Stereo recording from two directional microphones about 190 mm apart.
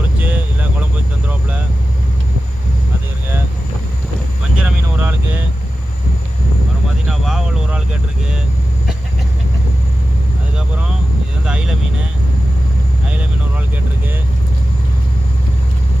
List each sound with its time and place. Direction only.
0.2 s vehicle: 10° right (ahead or behind)
4.5 s vehicle: 5° right (ahead or behind)
7.1 s vehicle: centre (ahead or behind)
11.4 s vehicle: 5° right (ahead or behind)